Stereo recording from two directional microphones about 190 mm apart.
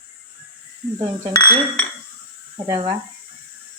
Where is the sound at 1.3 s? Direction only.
20° left (ahead or behind).